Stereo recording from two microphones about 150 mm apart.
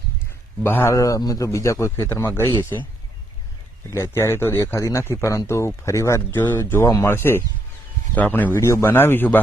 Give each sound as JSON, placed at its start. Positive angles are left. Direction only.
{"t": 0.6, "sound": "a man's voice", "side_deg": 15}
{"t": 3.9, "sound": "a man's voice", "side_deg": 15}